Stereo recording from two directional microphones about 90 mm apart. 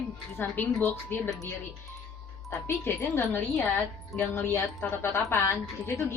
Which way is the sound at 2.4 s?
25° left (ahead or behind).